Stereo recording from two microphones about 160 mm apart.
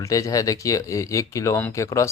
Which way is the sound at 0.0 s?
20° left (ahead or behind).